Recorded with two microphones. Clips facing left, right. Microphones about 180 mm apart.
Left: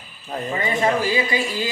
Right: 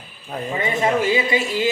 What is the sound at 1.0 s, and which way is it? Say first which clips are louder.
Speech: right 2 dB; 25° right (ahead or behind).